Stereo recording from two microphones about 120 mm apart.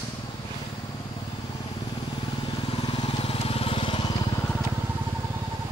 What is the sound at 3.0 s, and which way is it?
Vehicle, 55° left (ahead or behind).